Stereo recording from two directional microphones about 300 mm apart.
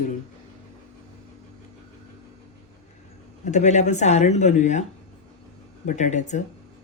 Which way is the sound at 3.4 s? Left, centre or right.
Left.